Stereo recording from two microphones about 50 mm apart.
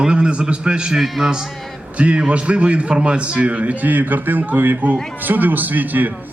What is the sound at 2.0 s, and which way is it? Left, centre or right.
A man's voice, right.